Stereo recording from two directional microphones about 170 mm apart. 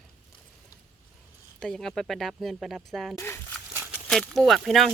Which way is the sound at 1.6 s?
5° left (ahead or behind).